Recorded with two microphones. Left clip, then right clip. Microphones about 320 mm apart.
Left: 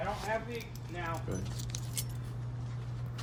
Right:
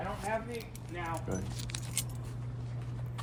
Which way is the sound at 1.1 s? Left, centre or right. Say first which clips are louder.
Right 2 dB; right.